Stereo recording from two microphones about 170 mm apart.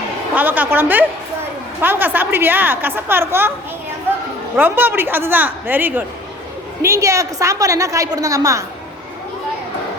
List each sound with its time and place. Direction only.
0.3 s a woman's voice: 10° right (ahead or behind)
4.5 s a woman's voice: 10° right (ahead or behind)